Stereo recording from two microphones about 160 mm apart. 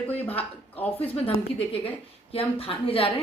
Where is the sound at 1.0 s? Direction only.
35° left (ahead or behind).